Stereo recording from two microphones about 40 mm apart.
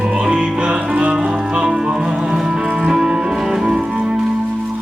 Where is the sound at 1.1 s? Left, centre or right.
Centre.